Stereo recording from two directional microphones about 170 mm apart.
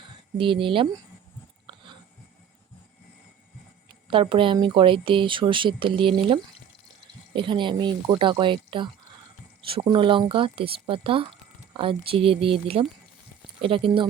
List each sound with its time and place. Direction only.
0.0 s speech: 30° right (ahead or behind)
1.6 s a sound: 30° right (ahead or behind)
4.1 s speech: 30° right (ahead or behind)